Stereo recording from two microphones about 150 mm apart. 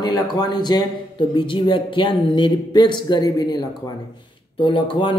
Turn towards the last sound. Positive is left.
turn(degrees=35)  # may be behind; listen again after turning